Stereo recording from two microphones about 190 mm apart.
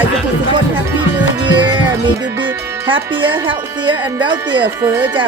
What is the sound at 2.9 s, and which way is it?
Speech, 25° right (ahead or behind).